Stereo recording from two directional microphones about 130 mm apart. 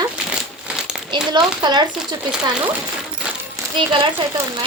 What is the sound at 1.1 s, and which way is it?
Speech, 35° right (ahead or behind).